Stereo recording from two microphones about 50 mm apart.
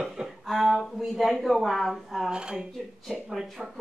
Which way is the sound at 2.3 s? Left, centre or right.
Centre.